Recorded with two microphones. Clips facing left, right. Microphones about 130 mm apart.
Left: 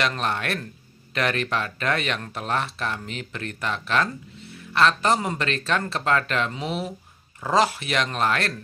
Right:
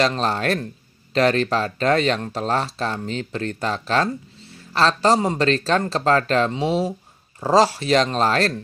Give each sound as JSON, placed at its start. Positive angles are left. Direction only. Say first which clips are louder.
{"t": 0.0, "sound": "speech", "louder": "right 5 dB", "side_deg": -30}